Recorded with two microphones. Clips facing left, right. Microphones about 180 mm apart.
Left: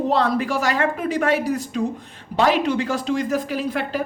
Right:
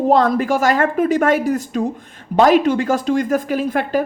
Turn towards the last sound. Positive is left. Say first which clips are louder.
# right 5 dB
turn(degrees=-50)  # may be behind; listen again after turning